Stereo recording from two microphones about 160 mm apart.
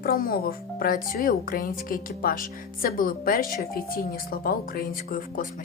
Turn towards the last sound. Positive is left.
turn(degrees=60)  # may be behind; listen again after turning